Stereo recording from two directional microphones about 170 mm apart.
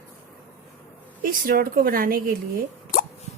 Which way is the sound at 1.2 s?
55° right (ahead or behind).